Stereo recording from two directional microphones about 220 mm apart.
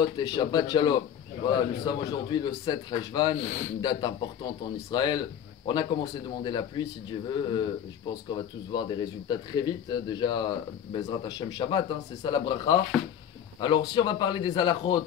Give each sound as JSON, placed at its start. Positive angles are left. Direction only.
{"t": 0.0, "sound": "speech", "side_deg": 20}